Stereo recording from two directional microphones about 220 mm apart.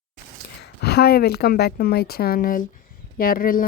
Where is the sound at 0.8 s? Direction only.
50° left (ahead or behind).